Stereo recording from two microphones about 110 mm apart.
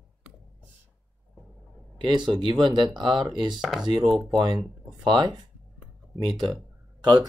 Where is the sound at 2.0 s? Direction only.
45° right (ahead or behind).